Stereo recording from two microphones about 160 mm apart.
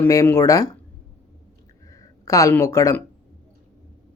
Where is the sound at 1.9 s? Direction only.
20° left (ahead or behind).